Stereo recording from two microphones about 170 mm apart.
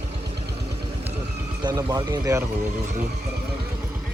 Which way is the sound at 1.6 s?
20° right (ahead or behind).